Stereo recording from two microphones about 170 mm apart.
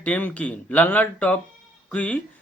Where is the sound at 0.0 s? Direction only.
10° left (ahead or behind).